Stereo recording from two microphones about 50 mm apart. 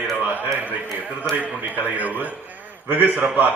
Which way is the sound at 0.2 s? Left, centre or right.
Right.